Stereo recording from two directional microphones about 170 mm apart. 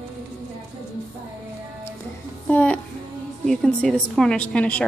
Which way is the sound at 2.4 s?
10° left (ahead or behind).